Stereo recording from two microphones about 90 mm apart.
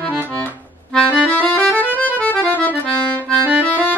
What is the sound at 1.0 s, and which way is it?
Music, 15° left (ahead or behind).